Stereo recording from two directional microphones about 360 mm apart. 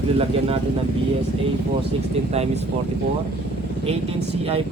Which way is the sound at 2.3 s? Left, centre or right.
Centre.